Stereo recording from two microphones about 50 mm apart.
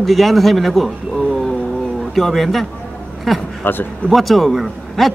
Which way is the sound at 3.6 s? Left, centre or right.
Left.